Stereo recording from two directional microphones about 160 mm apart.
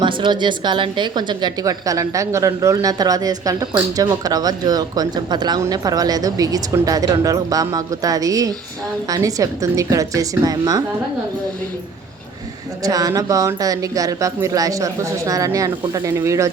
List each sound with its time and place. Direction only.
0.0 s a woman's voice: 30° right (ahead or behind)
12.8 s a woman's voice: 20° right (ahead or behind)